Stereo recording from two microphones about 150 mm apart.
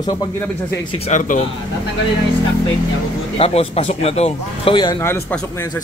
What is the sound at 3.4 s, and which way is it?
Speech, 40° left (ahead or behind).